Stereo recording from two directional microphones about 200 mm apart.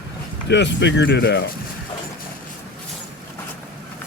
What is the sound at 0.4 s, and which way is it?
Speech, 60° left (ahead or behind).